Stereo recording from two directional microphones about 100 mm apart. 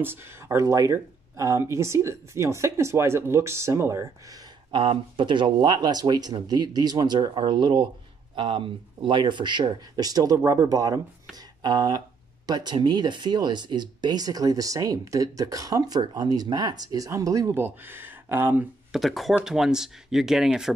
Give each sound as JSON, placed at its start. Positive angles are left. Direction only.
{"t": 0.0, "sound": "speech", "side_deg": -25}
{"t": 4.6, "sound": "speech", "side_deg": -55}
{"t": 17.6, "sound": "speech", "side_deg": -20}
{"t": 18.9, "sound": "speech", "side_deg": 0}